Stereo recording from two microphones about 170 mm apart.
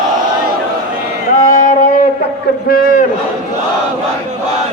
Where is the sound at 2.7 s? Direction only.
60° left (ahead or behind).